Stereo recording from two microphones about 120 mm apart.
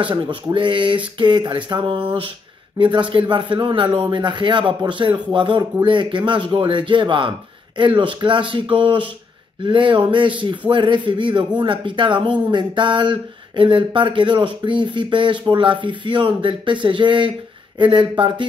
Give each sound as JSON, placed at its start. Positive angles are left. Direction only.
{"t": 0.0, "sound": "speech", "side_deg": -45}